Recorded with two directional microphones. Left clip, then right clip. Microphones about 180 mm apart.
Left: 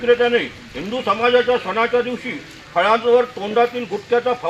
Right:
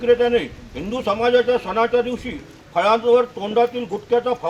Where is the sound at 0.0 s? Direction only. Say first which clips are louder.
Left 1 dB; 30° right (ahead or behind).